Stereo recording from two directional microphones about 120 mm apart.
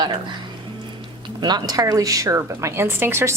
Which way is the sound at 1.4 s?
35° right (ahead or behind).